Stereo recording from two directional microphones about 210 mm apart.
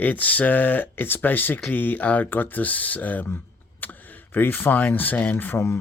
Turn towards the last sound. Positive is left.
turn(degrees=10)  # may be behind; listen again after turning